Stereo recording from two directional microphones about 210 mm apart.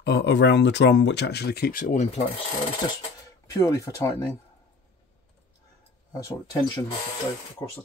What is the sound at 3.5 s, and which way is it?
Speech, 15° left (ahead or behind).